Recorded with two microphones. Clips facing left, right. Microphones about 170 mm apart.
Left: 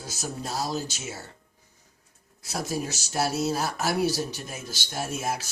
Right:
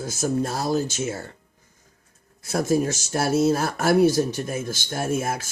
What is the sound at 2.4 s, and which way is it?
A man's voice, 50° right (ahead or behind).